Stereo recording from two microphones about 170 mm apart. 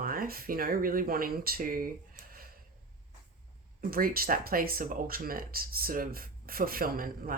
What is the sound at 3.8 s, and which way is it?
Speech, 60° right (ahead or behind).